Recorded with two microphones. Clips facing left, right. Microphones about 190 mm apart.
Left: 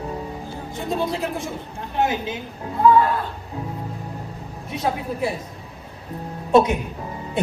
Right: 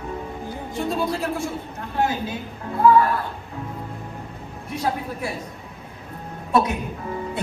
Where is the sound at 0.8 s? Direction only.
20° left (ahead or behind).